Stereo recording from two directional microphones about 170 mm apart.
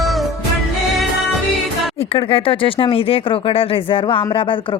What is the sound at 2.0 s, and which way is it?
Speech, 35° left (ahead or behind).